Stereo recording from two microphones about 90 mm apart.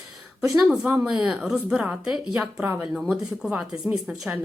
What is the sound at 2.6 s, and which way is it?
Speech, 20° right (ahead or behind).